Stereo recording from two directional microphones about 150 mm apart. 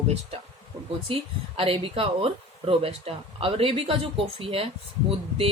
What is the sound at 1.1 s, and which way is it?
Speech, 40° right (ahead or behind).